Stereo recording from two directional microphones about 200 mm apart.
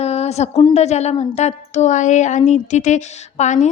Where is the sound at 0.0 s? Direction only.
30° left (ahead or behind).